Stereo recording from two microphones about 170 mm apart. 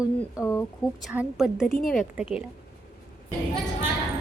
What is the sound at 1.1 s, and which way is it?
Speech, 5° right (ahead or behind).